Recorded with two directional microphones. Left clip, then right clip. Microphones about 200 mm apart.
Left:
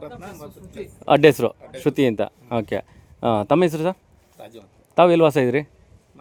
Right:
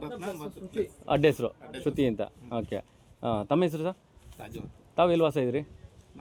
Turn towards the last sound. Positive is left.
turn(degrees=30)  # may be behind; listen again after turning